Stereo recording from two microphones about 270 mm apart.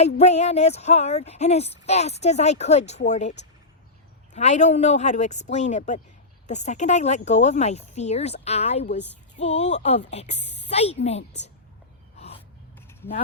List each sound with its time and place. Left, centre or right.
0.0 s speech: left
12.1 s gasp: left